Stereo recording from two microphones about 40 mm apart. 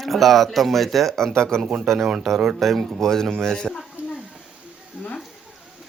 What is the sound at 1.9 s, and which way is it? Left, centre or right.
Speech, centre.